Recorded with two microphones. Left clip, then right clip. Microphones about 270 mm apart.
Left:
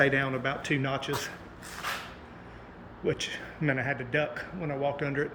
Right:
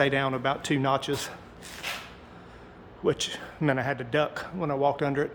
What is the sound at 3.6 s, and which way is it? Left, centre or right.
A man's voice, right.